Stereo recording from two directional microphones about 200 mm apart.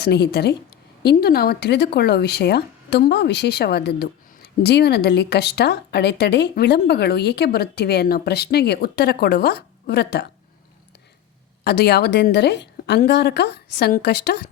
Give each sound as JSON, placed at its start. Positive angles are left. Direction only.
{"t": 0.0, "sound": "speech", "side_deg": 55}
{"t": 11.6, "sound": "speech", "side_deg": 55}